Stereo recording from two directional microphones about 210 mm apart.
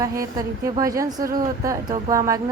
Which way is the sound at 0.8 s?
15° right (ahead or behind).